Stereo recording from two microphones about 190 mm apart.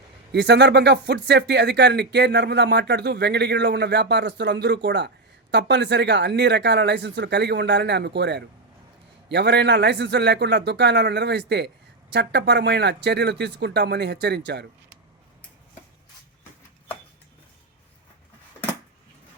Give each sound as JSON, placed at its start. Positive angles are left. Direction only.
{"t": 0.3, "sound": "speech", "side_deg": -60}